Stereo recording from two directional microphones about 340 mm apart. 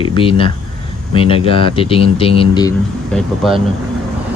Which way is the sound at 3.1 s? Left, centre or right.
Centre.